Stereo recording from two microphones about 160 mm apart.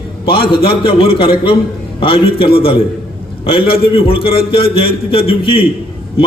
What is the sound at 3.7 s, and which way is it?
A man's voice, 35° left (ahead or behind).